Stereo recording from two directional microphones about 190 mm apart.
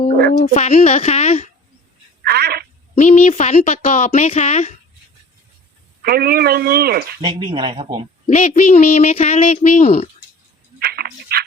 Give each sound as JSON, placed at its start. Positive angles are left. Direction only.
{"t": 0.3, "sound": "speech", "side_deg": 40}
{"t": 2.2, "sound": "telephone", "side_deg": -55}
{"t": 2.9, "sound": "speech", "side_deg": 35}
{"t": 6.0, "sound": "speech", "side_deg": -55}
{"t": 7.2, "sound": "speech", "side_deg": -30}
{"t": 8.3, "sound": "speech", "side_deg": 40}
{"t": 10.8, "sound": "a sound", "side_deg": -55}